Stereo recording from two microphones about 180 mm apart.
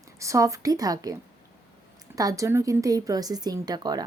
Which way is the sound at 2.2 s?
20° right (ahead or behind).